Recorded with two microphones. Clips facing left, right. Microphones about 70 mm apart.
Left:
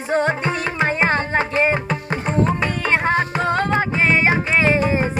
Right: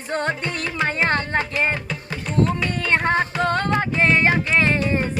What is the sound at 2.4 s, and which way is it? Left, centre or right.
Tabla, left.